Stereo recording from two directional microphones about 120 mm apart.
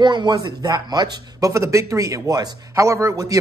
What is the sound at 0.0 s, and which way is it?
A man's voice, 40° right (ahead or behind).